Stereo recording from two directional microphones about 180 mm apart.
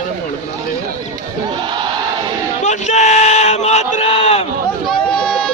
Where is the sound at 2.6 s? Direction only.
40° left (ahead or behind).